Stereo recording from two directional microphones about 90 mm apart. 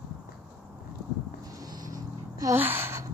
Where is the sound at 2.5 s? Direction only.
25° right (ahead or behind).